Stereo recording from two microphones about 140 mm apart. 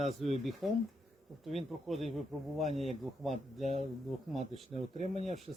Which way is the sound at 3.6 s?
50° right (ahead or behind).